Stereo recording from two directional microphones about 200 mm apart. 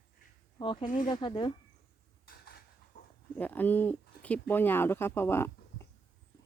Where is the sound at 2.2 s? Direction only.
50° left (ahead or behind).